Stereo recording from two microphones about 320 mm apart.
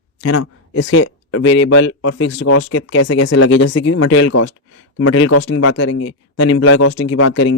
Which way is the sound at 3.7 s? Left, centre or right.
Left.